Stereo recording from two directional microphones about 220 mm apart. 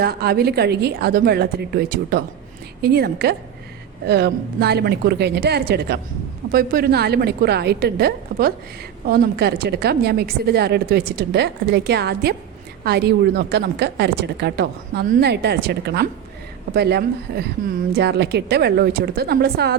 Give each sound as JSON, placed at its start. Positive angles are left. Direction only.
{"t": 0.0, "sound": "a woman's voice", "side_deg": -45}